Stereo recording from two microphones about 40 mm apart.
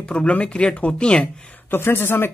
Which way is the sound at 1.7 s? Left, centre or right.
Left.